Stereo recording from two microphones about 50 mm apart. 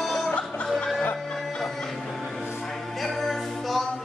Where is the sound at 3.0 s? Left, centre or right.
Centre.